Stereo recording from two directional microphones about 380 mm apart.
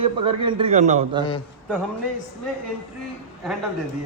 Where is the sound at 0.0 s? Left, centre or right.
Centre.